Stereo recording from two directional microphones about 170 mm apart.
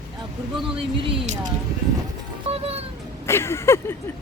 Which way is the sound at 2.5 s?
35° right (ahead or behind).